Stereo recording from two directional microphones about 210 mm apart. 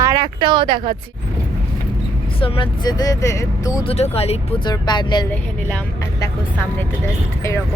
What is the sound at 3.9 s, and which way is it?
Speech, 30° left (ahead or behind).